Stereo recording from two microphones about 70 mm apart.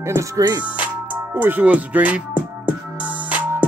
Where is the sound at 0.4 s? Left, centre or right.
Right.